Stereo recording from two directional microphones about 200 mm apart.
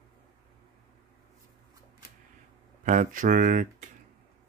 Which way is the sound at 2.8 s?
40° right (ahead or behind).